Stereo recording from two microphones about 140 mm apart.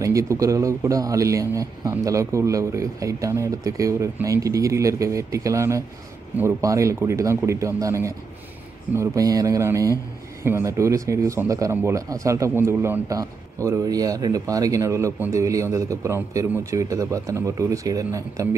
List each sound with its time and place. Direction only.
0.0 s a man's voice: 20° right (ahead or behind)